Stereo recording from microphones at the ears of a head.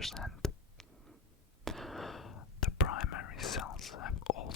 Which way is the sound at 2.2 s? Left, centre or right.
Left.